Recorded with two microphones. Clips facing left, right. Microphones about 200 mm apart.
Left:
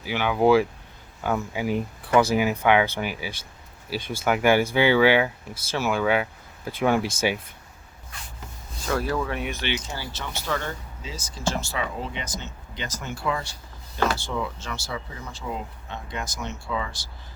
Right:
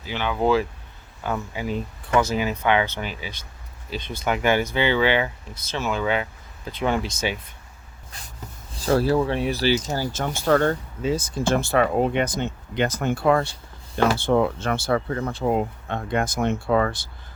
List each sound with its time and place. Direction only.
0.0 s speech: 10° left (ahead or behind)
8.9 s speech: 30° right (ahead or behind); by 17.1 s 55° right (ahead or behind)